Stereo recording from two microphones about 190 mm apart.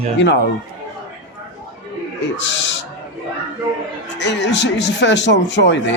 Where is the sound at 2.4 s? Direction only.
70° left (ahead or behind).